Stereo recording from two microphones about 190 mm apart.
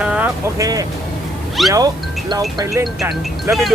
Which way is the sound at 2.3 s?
20° right (ahead or behind).